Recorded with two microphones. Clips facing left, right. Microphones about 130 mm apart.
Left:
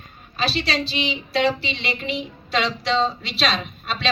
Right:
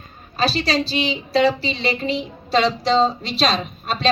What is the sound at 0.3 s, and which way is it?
A woman's voice, 40° right (ahead or behind).